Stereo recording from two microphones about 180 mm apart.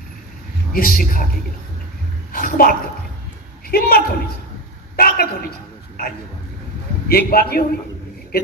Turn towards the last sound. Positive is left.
turn(degrees=55)  # may be behind; listen again after turning